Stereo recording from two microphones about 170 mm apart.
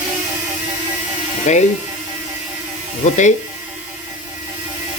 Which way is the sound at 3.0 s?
45° left (ahead or behind).